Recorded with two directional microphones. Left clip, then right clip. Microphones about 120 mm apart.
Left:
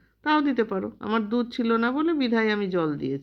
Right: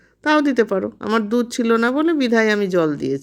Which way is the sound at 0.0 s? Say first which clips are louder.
Right 6 dB; 30° right (ahead or behind).